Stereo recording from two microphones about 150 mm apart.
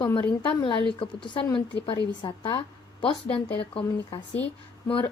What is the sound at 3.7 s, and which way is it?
Speech, 35° left (ahead or behind).